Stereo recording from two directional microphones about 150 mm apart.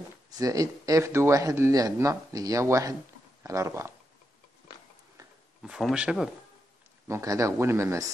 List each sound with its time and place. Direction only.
0.3 s speech: 25° right (ahead or behind)
5.6 s speech: centre (ahead or behind)
7.1 s speech: 20° right (ahead or behind)